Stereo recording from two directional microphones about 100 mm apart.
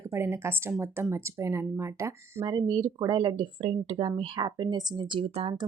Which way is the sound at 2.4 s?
45° right (ahead or behind).